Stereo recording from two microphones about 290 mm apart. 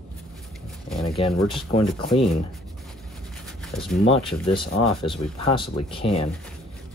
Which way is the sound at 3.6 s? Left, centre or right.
Centre.